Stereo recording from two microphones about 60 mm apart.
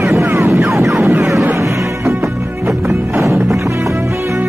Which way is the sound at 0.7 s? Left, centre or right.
Right.